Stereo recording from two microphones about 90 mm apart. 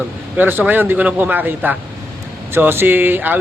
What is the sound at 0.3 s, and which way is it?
Speech, 20° right (ahead or behind).